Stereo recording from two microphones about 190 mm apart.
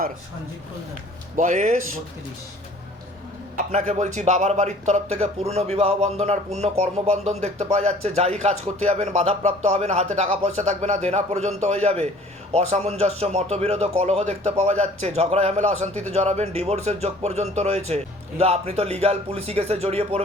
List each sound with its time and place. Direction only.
1.4 s speech: 40° right (ahead or behind)
3.7 s speech: 40° right (ahead or behind)